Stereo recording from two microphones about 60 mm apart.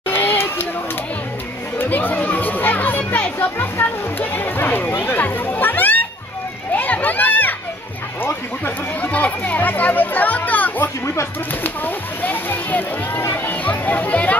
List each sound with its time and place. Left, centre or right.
0.1 s a sound: left
1.8 s speech: left
5.2 s music: left
6.7 s children playing: left
8.2 s speech: left